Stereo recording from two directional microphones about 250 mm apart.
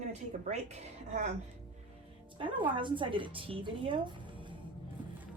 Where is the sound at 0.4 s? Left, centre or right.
Right.